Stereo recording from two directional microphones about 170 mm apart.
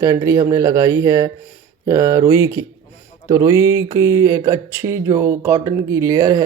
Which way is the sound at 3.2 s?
15° right (ahead or behind).